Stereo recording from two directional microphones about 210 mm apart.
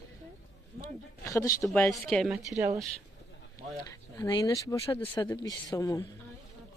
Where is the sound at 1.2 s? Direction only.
15° left (ahead or behind).